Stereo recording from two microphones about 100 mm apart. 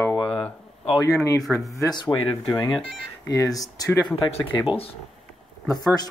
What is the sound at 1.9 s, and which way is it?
Speech, 50° left (ahead or behind).